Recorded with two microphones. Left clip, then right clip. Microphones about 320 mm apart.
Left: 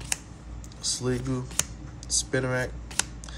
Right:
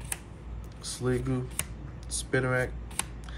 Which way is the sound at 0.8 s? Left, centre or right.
Centre.